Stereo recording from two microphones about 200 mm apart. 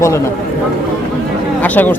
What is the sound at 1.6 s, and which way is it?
Speech, 10° left (ahead or behind).